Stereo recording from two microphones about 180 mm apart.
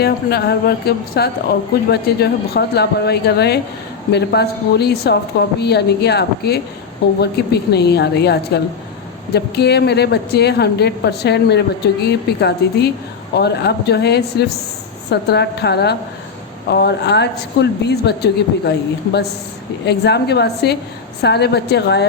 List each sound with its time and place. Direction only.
0.0 s a woman's voice: 60° left (ahead or behind)
19.8 s a woman's voice: 65° left (ahead or behind)